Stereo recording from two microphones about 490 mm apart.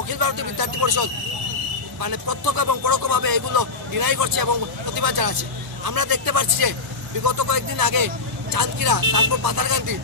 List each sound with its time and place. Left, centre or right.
0.1 s speech: right